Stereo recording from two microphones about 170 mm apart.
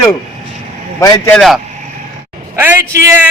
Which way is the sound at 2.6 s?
15° right (ahead or behind).